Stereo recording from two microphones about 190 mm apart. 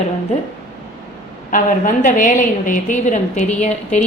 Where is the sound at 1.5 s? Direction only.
45° left (ahead or behind).